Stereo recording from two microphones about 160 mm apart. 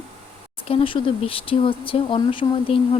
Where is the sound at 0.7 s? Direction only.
35° left (ahead or behind).